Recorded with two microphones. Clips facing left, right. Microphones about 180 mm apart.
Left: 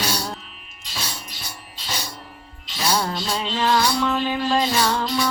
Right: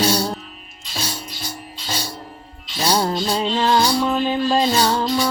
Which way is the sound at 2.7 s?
35° right (ahead or behind).